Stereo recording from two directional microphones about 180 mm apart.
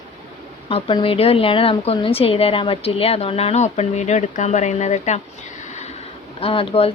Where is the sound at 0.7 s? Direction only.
30° left (ahead or behind).